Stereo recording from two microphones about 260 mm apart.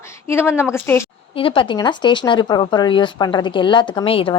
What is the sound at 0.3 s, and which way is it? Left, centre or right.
Speech, centre.